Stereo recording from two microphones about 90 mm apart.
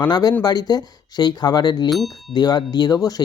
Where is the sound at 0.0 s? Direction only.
50° left (ahead or behind).